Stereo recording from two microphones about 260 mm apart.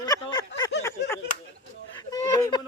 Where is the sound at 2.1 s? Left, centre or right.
Centre.